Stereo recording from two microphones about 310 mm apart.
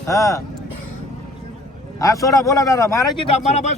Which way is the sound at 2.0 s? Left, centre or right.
Centre.